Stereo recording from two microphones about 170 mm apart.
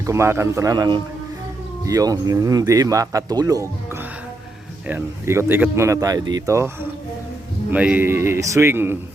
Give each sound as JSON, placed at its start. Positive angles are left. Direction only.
{"t": 0.0, "sound": "speech", "side_deg": -15}
{"t": 4.9, "sound": "speech", "side_deg": -15}
{"t": 7.7, "sound": "speech", "side_deg": -10}